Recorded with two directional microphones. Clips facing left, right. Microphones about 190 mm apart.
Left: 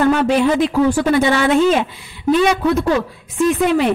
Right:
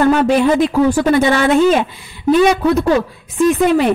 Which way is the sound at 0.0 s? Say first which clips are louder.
Right 2 dB; 45° right (ahead or behind).